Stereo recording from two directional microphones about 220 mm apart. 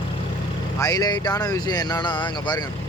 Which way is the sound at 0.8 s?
15° left (ahead or behind).